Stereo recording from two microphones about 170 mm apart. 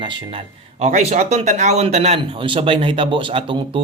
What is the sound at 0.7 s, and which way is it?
Speech, 40° right (ahead or behind).